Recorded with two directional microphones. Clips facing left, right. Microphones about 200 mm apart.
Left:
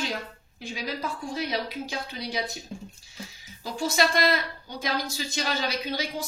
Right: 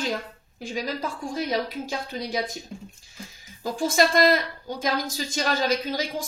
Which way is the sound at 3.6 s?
50° right (ahead or behind).